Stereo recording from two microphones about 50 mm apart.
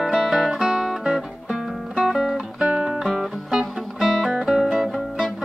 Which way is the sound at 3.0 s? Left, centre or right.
Centre.